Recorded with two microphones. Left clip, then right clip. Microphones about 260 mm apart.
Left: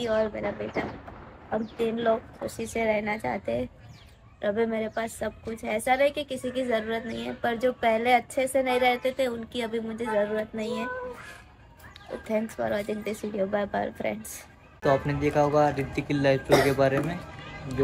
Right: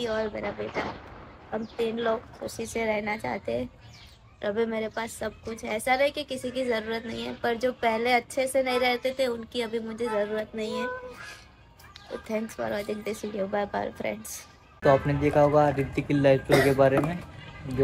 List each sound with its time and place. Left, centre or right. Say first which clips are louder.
0.0 s a woman's voice: left 3 dB; centre
1.9 s a woman's voice: left 4 dB; centre
12.3 s a woman's voice: left 3 dB; centre